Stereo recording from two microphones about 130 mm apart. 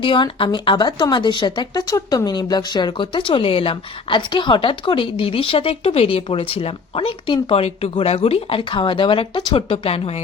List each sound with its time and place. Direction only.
0.0 s speech: 40° left (ahead or behind)